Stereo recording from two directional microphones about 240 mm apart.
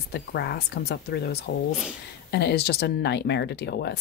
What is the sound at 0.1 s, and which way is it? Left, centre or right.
Speech, left.